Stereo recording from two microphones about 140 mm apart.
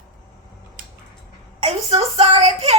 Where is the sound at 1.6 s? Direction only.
45° right (ahead or behind).